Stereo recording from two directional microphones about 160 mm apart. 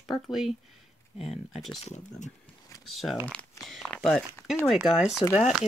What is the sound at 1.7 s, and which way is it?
Speech, 45° left (ahead or behind).